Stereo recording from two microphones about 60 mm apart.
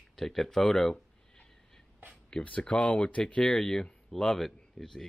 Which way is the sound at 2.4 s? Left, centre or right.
Left.